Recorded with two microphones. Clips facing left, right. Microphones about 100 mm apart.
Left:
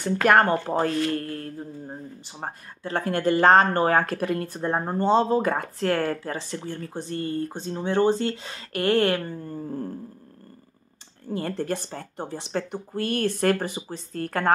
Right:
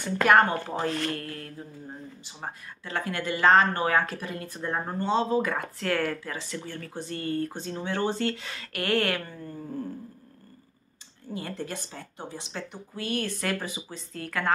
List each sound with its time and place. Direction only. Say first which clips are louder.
0.3 s speech: left 2 dB; 45° left (ahead or behind)
1.1 s speech: left 6 dB; 35° left (ahead or behind); by 4.5 s 55° left (ahead or behind)
4.5 s speech: left 5 dB; 35° left (ahead or behind)
11.3 s speech: left 7 dB; 45° left (ahead or behind)